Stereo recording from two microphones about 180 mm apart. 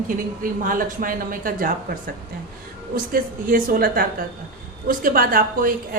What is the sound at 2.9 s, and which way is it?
Speech, 50° right (ahead or behind).